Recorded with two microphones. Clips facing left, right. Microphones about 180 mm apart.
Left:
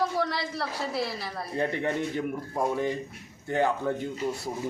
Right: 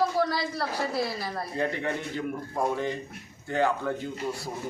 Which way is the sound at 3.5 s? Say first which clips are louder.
Even; 20° left (ahead or behind).